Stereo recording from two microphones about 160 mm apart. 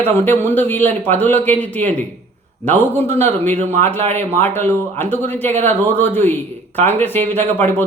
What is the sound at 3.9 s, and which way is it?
Speech, 45° right (ahead or behind).